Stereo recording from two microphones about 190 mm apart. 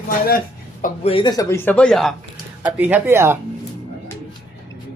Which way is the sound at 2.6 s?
10° right (ahead or behind).